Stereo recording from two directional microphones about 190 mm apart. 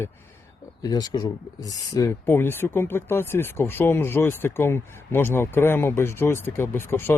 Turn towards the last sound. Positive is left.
turn(degrees=15)  # may be behind; listen again after turning